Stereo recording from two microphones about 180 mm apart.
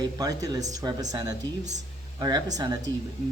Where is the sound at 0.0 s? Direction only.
20° right (ahead or behind).